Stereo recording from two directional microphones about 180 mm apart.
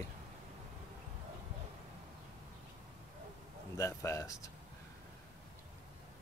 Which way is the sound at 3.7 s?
15° left (ahead or behind).